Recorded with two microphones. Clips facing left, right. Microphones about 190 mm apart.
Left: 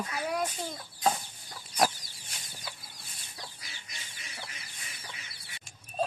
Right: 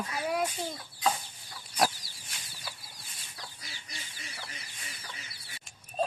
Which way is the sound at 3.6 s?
35° right (ahead or behind).